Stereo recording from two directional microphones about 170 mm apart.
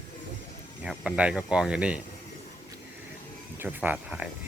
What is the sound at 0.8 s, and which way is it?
Speech, 5° right (ahead or behind).